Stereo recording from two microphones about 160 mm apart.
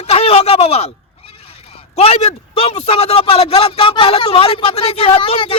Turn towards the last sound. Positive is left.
turn(degrees=35)  # may be behind; listen again after turning